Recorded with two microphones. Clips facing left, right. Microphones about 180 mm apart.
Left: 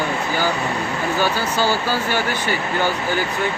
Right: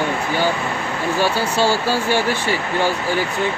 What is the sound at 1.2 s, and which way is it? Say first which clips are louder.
Speech: right 4 dB; 30° right (ahead or behind).